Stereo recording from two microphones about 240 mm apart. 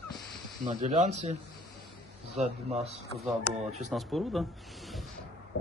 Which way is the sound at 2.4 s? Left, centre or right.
Right.